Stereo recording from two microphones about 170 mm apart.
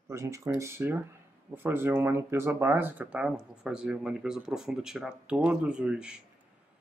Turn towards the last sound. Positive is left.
turn(degrees=-5)  # may be behind; listen again after turning